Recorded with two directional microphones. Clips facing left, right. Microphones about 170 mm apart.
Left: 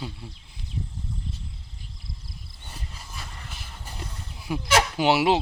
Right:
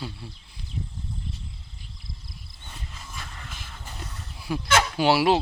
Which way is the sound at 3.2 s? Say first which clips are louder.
Even; centre (ahead or behind).